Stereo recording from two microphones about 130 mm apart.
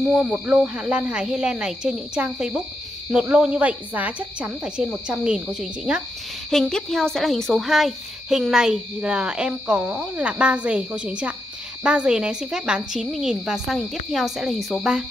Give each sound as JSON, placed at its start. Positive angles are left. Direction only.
{"t": 0.0, "sound": "a woman's voice", "side_deg": -5}